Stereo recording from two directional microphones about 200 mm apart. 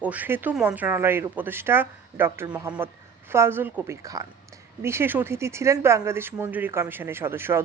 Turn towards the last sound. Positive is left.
turn(degrees=-10)  # may be behind; listen again after turning